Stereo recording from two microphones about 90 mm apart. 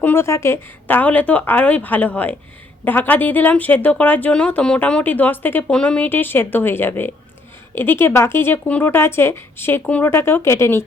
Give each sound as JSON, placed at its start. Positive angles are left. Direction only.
{"t": 0.0, "sound": "speech", "side_deg": 25}
{"t": 5.7, "sound": "speech", "side_deg": 10}
{"t": 6.1, "sound": "speech", "side_deg": 20}